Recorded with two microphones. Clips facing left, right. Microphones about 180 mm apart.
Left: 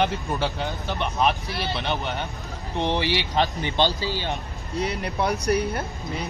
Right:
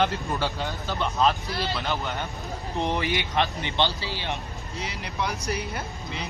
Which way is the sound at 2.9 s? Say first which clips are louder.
Left 4 dB; 30° left (ahead or behind).